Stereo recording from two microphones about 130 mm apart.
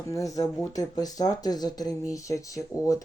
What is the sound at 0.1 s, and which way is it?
Speech, 25° left (ahead or behind).